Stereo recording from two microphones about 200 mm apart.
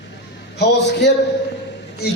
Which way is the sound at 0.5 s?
55° left (ahead or behind).